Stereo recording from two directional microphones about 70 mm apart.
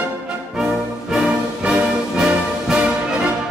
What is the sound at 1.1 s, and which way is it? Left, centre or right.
Music, centre.